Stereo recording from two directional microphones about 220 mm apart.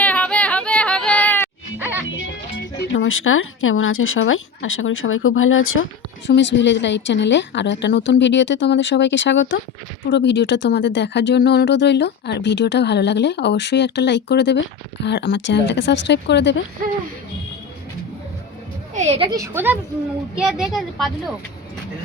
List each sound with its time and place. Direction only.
0.0 s music: 5° left (ahead or behind)
1.8 s music: 10° right (ahead or behind)
2.9 s speech: 65° left (ahead or behind)
6.2 s speech: 55° left (ahead or behind)
18.9 s a woman's voice: 30° right (ahead or behind)
19.3 s speech: 10° right (ahead or behind)